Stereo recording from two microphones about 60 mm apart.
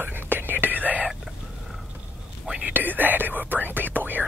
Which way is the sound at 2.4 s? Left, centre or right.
Centre.